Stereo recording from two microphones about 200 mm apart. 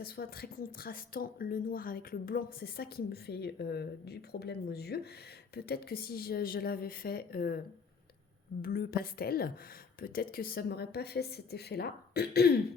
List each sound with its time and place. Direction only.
0.0 s a woman's voice: 50° left (ahead or behind)
8.6 s a woman's voice: 50° left (ahead or behind)